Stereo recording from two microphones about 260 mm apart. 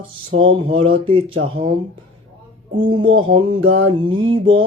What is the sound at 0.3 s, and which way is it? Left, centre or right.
Mantra, right.